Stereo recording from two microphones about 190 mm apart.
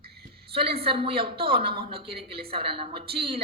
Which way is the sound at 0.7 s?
30° right (ahead or behind).